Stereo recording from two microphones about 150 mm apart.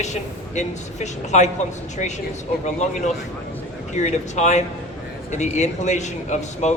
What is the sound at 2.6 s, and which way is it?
A man's voice, 55° left (ahead or behind).